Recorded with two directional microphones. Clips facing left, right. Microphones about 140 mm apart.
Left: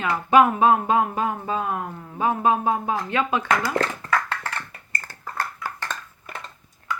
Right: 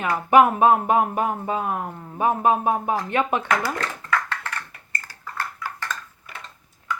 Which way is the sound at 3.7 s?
35° left (ahead or behind).